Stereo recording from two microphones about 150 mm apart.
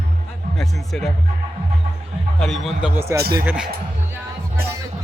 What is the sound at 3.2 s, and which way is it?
Speech, 90° right.